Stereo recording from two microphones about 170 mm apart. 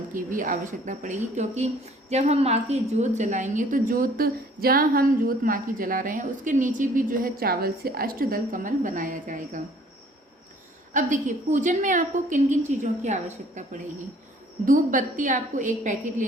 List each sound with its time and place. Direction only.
0.1 s a woman's voice: 50° right (ahead or behind)
10.9 s a woman's voice: 50° right (ahead or behind)